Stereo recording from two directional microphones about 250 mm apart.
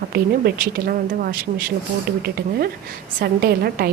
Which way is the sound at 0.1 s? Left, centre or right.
Right.